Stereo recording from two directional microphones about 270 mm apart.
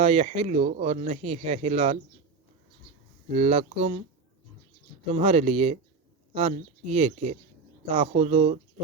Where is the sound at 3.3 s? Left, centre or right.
Right.